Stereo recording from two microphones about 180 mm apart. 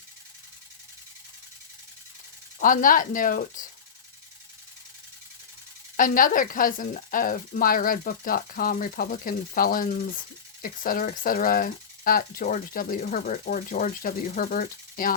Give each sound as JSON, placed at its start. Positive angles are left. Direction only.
{"t": 2.6, "sound": "speech", "side_deg": 50}
{"t": 6.0, "sound": "speech", "side_deg": 50}